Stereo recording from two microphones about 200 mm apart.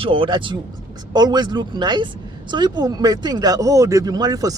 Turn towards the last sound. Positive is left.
turn(degrees=-20)  # may be behind; listen again after turning